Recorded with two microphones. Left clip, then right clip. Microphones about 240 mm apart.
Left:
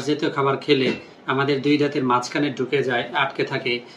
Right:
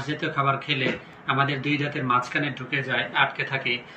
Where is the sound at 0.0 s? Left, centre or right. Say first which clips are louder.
Left 4 dB; centre.